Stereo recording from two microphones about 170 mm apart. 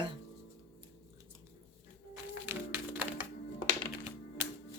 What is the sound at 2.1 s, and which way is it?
Music, 15° right (ahead or behind).